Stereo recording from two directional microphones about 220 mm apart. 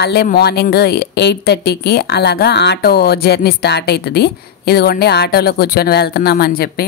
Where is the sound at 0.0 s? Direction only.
45° left (ahead or behind).